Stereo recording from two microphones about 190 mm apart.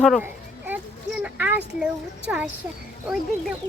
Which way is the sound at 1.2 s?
10° right (ahead or behind).